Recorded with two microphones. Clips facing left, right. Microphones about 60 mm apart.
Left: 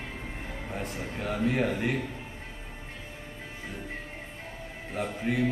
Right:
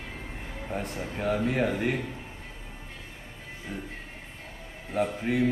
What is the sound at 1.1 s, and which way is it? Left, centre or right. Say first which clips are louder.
Speech: right 2 dB; centre.